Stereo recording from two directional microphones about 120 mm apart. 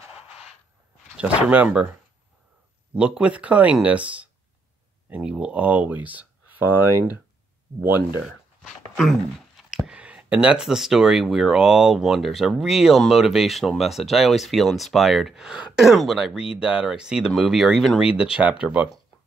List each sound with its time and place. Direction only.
0.1 s a sound: 5° right (ahead or behind)
1.1 s speech: 10° right (ahead or behind)
2.9 s speech: 10° right (ahead or behind)
7.7 s speech: 50° right (ahead or behind)
8.2 s a sound: centre (ahead or behind)
9.6 s speech: 5° right (ahead or behind)